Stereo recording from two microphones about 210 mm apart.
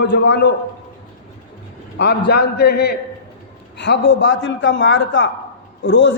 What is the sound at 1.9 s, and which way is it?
A man's voice, 50° left (ahead or behind).